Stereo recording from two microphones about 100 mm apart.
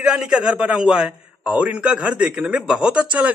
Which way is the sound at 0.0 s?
5° right (ahead or behind).